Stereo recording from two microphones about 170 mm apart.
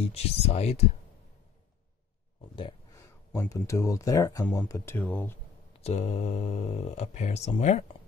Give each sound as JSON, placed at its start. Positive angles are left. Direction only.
{"t": 0.0, "sound": "speech", "side_deg": 35}
{"t": 2.9, "sound": "speech", "side_deg": 20}
{"t": 5.7, "sound": "speech", "side_deg": 35}